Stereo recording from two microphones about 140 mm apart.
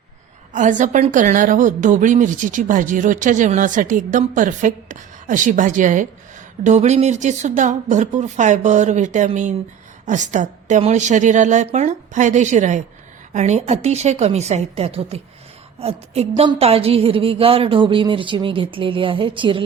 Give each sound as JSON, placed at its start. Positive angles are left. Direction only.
{"t": 0.5, "sound": "speech", "side_deg": -65}
{"t": 6.7, "sound": "a woman's voice", "side_deg": -55}